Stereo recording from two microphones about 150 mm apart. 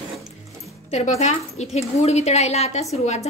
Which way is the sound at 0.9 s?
50° left (ahead or behind).